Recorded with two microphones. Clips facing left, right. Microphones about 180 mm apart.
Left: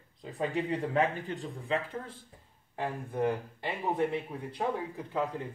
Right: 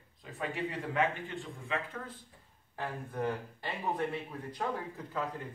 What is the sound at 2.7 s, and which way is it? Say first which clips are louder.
Speech: left 4 dB; 15° left (ahead or behind).